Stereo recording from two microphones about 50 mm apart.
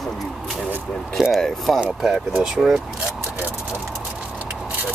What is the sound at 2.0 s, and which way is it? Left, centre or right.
Speech, centre.